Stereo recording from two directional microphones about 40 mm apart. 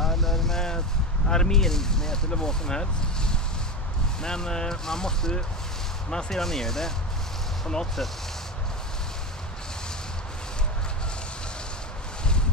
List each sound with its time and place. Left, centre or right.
0.0 s vehicle: centre
1.3 s speech: centre